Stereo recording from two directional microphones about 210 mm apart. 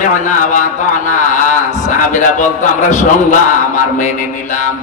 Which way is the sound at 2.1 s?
35° left (ahead or behind).